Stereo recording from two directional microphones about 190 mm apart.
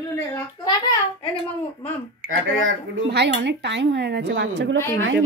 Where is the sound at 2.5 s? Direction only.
90° right; by 4.5 s 70° right (ahead or behind).